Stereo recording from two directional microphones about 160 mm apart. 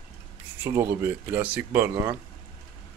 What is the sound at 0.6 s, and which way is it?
Speech, 15° right (ahead or behind).